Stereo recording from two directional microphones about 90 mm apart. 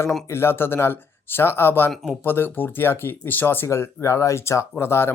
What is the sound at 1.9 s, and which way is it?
Speech, centre (ahead or behind).